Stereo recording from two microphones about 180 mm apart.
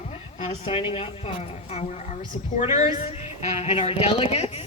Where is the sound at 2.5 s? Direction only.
40° left (ahead or behind).